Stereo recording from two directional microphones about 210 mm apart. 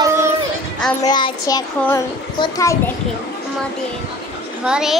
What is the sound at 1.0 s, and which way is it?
Child singing, 20° left (ahead or behind).